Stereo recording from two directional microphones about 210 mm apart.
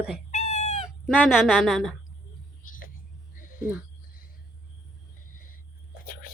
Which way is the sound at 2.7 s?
40° left (ahead or behind).